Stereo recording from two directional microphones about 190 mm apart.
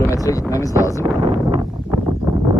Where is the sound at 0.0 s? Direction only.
15° left (ahead or behind).